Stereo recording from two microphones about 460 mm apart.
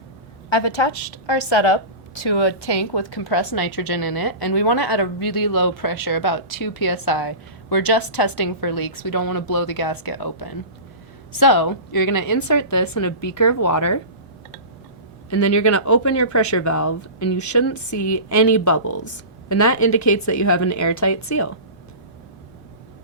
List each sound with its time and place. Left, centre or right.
0.5 s a woman's voice: left
1.3 s a woman's voice: left
1.5 s a woman's voice: left
2.2 s a woman's voice: left
15.3 s speech: left